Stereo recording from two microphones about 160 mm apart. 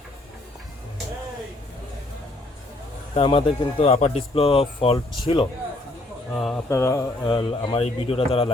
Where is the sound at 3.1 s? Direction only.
35° left (ahead or behind).